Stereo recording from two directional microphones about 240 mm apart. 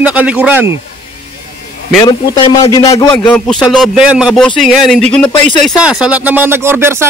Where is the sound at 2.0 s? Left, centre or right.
Centre.